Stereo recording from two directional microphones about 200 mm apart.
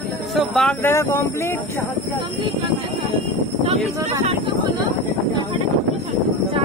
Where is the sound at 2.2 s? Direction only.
25° right (ahead or behind).